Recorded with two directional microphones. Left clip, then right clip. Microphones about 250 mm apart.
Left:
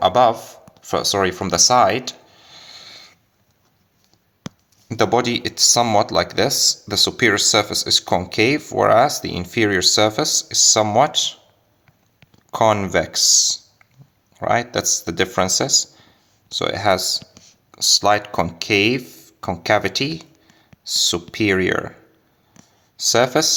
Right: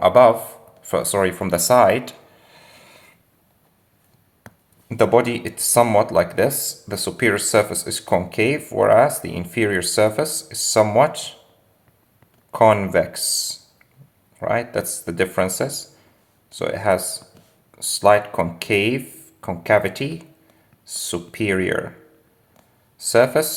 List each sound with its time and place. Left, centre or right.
0.0 s speech: left
0.8 s a sound: left
4.9 s speech: left
12.5 s speech: left
23.0 s speech: left